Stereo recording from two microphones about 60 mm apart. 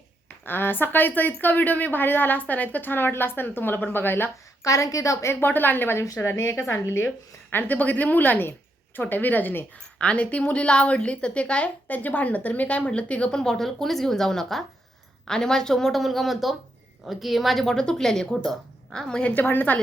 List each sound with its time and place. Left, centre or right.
0.4 s a woman's voice: left
4.6 s a woman's voice: left
5.3 s a woman's voice: left
6.1 s a woman's voice: left
7.5 s a woman's voice: left
9.7 s a woman's voice: centre
19.2 s a woman's voice: left